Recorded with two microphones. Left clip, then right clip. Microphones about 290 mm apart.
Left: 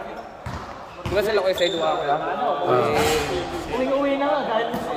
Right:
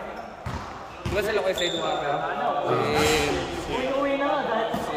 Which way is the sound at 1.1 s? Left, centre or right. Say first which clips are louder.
Left 4 dB; centre.